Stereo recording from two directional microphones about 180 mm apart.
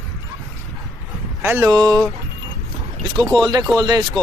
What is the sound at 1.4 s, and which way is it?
Speech, 15° right (ahead or behind).